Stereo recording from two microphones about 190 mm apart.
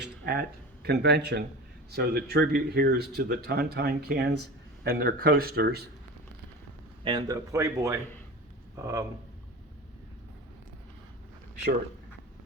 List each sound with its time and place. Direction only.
0.0 s speech: 55° right (ahead or behind)
7.0 s speech: 25° right (ahead or behind)